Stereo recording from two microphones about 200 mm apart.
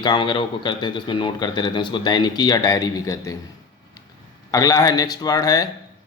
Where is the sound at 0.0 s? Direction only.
20° left (ahead or behind).